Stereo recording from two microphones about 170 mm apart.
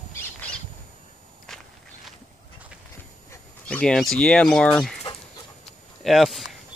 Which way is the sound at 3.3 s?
5° left (ahead or behind).